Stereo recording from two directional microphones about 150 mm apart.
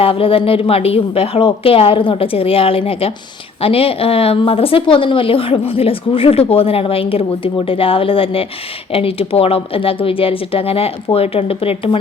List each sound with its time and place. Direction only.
0.0 s a woman's voice: 40° left (ahead or behind)